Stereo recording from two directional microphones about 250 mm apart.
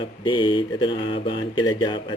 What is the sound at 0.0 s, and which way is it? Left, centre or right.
Speech, centre.